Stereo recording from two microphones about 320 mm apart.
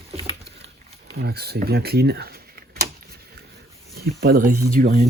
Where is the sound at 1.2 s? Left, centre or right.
Right.